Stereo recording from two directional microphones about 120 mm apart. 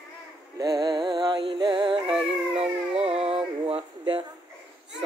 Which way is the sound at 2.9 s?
55° right (ahead or behind).